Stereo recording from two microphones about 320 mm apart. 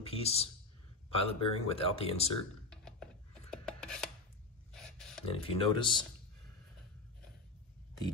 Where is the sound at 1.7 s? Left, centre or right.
Centre.